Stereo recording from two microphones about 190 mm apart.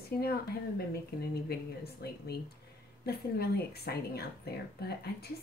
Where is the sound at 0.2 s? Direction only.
55° left (ahead or behind).